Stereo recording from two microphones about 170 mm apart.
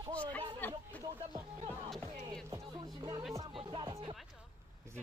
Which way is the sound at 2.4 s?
20° right (ahead or behind).